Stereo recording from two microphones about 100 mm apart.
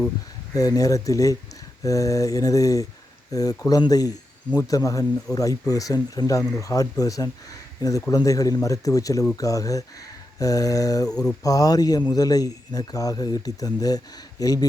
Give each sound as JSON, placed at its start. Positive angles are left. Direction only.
{"t": 0.5, "sound": "speech", "side_deg": 35}
{"t": 11.1, "sound": "speech", "side_deg": 10}
{"t": 11.4, "sound": "speech", "side_deg": 35}